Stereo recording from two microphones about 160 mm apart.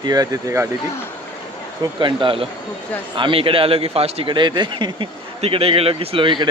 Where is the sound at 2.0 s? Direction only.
30° right (ahead or behind).